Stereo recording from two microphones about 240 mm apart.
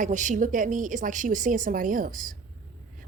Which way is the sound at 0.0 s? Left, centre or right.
Right.